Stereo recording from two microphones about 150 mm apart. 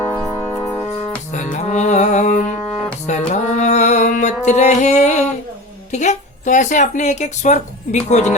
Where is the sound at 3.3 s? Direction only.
55° left (ahead or behind).